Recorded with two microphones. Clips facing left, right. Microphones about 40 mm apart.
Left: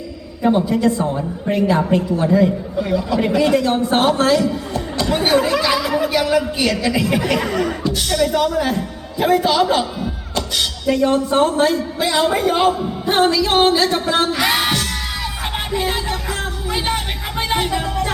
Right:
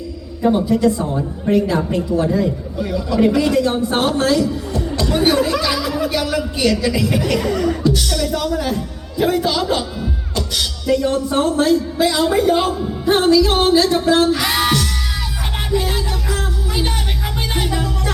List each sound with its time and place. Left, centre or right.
0.4 s a man's voice: left
4.9 s a man's voice: centre
15.7 s music: left